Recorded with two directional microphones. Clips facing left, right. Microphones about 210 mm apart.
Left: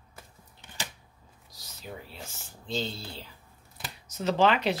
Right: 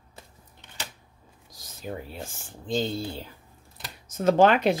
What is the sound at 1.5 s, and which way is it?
Speech, 50° right (ahead or behind).